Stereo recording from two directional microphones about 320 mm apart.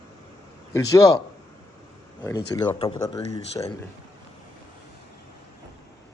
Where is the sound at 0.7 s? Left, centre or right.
Centre.